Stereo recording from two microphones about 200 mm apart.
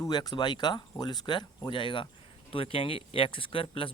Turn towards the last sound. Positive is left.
turn(degrees=25)  # may be behind; listen again after turning